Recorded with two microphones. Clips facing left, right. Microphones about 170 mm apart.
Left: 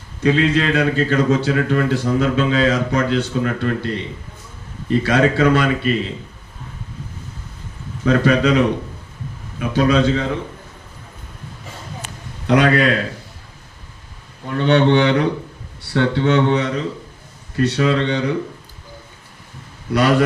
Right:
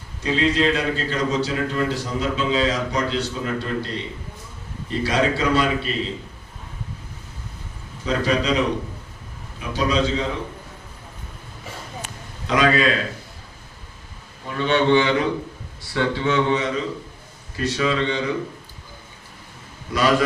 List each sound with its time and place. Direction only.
0.2 s a man's voice: 55° left (ahead or behind)
5.0 s a man's voice: 55° left (ahead or behind)
8.0 s a man's voice: 55° left (ahead or behind)
9.6 s a man's voice: 55° left (ahead or behind)
12.5 s a man's voice: 60° left (ahead or behind)
14.5 s a man's voice: 60° left (ahead or behind)
19.9 s a man's voice: 65° left (ahead or behind)